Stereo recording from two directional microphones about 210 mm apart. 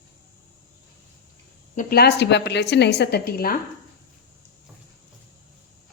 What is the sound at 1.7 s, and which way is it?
A woman's voice, 50° left (ahead or behind).